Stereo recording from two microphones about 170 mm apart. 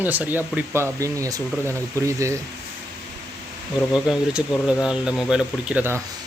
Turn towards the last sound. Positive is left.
turn(degrees=-10)  # may be behind; listen again after turning